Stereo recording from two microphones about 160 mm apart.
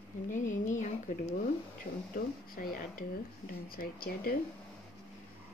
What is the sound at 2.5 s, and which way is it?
Speech, 65° left (ahead or behind).